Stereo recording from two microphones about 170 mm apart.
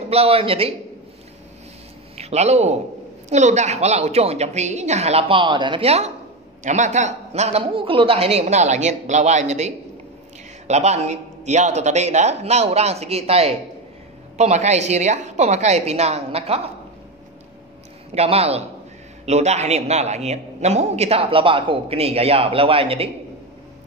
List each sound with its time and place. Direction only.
0.1 s a man's voice: 35° right (ahead or behind)
2.1 s a man's voice: 40° right (ahead or behind)
18.1 s a man's voice: 35° right (ahead or behind)